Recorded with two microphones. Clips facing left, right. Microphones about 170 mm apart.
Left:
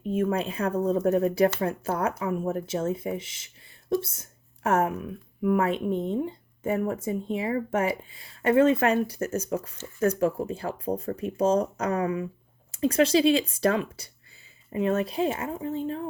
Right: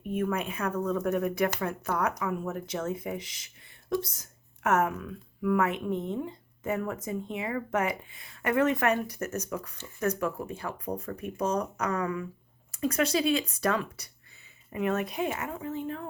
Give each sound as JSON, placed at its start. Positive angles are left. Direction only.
{"t": 0.0, "sound": "speech", "side_deg": 30}